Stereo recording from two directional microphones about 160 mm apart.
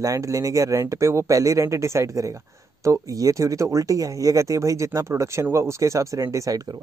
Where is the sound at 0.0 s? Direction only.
20° right (ahead or behind).